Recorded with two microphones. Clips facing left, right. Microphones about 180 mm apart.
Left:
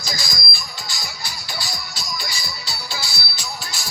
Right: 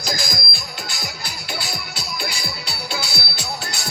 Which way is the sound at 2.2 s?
60° right (ahead or behind).